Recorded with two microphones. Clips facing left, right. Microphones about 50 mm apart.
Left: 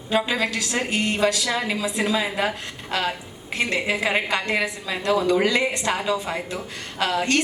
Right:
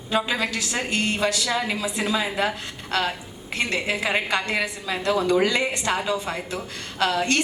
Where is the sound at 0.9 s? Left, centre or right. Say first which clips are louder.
Left 2 dB; centre.